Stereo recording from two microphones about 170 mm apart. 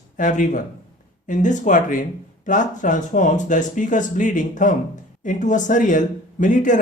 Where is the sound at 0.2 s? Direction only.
50° left (ahead or behind).